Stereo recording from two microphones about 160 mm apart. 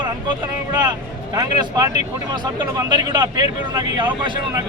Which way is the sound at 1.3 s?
25° right (ahead or behind).